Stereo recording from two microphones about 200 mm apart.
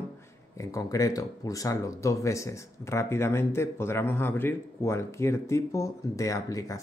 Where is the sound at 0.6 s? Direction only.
15° left (ahead or behind).